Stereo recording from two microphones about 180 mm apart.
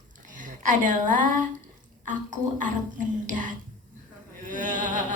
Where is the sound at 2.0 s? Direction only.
45° right (ahead or behind).